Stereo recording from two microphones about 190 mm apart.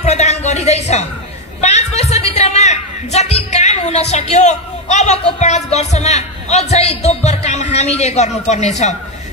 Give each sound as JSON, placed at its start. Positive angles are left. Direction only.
{"t": 0.0, "sound": "music", "side_deg": 35}
{"t": 1.6, "sound": "a woman's voice", "side_deg": 35}